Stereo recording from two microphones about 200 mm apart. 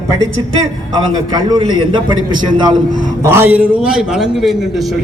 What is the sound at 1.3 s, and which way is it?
A man's voice, 20° right (ahead or behind).